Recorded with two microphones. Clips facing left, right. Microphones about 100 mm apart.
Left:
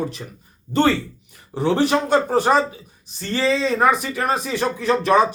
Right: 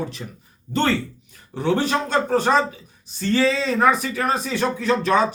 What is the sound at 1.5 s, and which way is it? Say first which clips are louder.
Speech: left 3 dB; 15° left (ahead or behind).